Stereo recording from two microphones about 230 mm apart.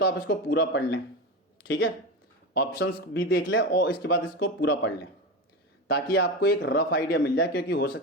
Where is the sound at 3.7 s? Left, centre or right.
Left.